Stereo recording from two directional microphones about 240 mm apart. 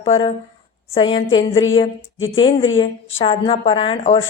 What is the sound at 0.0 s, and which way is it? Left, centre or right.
A woman's voice, left.